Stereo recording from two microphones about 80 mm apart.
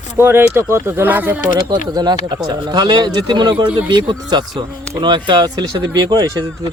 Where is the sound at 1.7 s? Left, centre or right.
Right.